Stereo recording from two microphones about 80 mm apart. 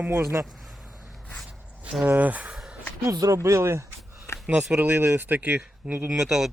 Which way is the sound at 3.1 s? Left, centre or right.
Right.